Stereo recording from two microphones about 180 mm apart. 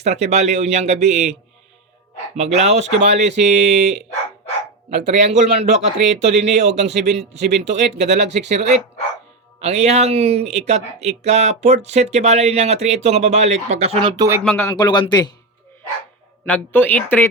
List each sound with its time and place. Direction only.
0.0 s speech: 40° right (ahead or behind)
5.0 s speech: 40° right (ahead or behind)
14.4 s speech: 5° left (ahead or behind)
14.7 s speech: 25° left (ahead or behind)
16.5 s a woman's voice: 10° left (ahead or behind)